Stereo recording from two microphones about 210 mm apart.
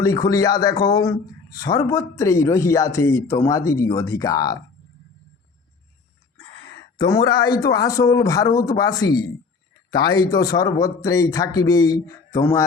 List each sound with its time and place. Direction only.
0.0 s a man's voice: 15° left (ahead or behind)
7.0 s a man's voice: 20° left (ahead or behind)